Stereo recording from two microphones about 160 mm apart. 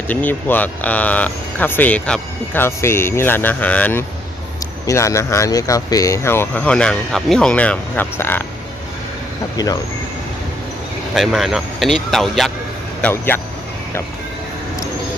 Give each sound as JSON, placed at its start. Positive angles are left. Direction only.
{"t": 0.1, "sound": "speech", "side_deg": 10}
{"t": 11.1, "sound": "speech", "side_deg": 0}